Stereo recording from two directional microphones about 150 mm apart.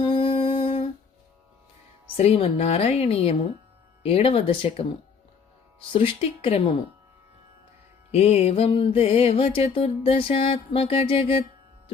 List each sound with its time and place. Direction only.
0.0 s humming: 35° left (ahead or behind)
2.1 s a woman's voice: 45° left (ahead or behind)
4.0 s music: 40° left (ahead or behind)
5.9 s music: 35° left (ahead or behind)
8.1 s music: 45° left (ahead or behind)